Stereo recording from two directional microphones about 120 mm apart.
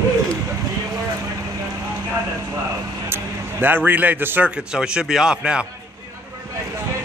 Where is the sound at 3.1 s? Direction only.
15° right (ahead or behind).